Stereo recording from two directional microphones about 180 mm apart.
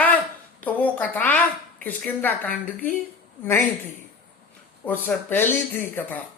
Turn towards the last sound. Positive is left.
turn(degrees=10)  # may be behind; listen again after turning